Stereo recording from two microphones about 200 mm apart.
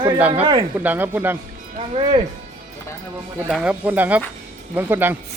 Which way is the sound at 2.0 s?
25° right (ahead or behind).